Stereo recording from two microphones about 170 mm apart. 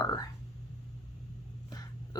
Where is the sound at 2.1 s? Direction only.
25° left (ahead or behind).